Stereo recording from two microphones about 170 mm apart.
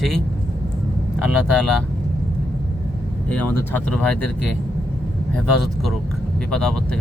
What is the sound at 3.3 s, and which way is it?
Speech, 10° left (ahead or behind).